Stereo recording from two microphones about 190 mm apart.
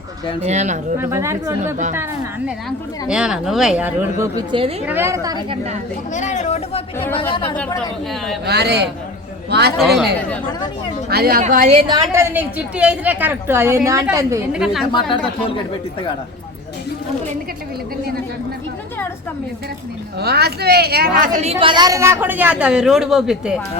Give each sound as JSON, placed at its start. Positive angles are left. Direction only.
{"t": 0.4, "sound": "a woman's voice", "side_deg": -35}
{"t": 0.9, "sound": "a woman's voice", "side_deg": -15}
{"t": 2.6, "sound": "a woman's voice", "side_deg": -5}
{"t": 4.2, "sound": "speech", "side_deg": -25}
{"t": 4.9, "sound": "a woman's voice", "side_deg": -15}
{"t": 6.1, "sound": "speech", "side_deg": 40}
{"t": 8.4, "sound": "a woman's voice", "side_deg": -60}
{"t": 9.7, "sound": "a woman's voice", "side_deg": 0}
{"t": 11.1, "sound": "a woman's voice", "side_deg": -55}
{"t": 11.4, "sound": "a woman's voice", "side_deg": -35}
{"t": 12.1, "sound": "a woman's voice", "side_deg": -10}
{"t": 14.5, "sound": "a woman's voice", "side_deg": 0}
{"t": 20.1, "sound": "a woman's voice", "side_deg": -60}
{"t": 21.6, "sound": "a woman's voice", "side_deg": -25}